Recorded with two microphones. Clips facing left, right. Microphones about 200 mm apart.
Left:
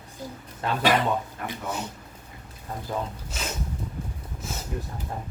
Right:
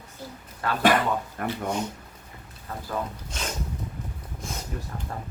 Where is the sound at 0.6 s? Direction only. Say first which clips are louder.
Even; 20° left (ahead or behind).